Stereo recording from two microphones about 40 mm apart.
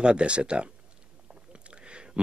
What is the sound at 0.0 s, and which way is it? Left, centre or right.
Speech, right.